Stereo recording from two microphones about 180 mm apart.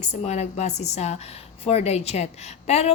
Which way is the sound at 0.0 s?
40° left (ahead or behind).